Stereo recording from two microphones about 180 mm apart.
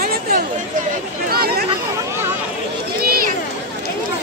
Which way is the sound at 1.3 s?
60° right (ahead or behind).